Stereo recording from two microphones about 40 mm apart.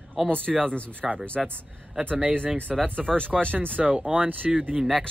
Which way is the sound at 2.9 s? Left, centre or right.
Left.